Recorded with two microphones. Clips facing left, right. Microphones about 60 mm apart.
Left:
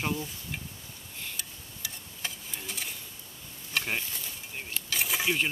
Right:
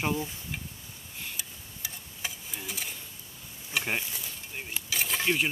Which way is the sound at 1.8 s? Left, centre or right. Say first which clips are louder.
Even; centre.